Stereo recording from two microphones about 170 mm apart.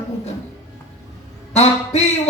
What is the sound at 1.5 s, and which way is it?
Speech, 40° left (ahead or behind).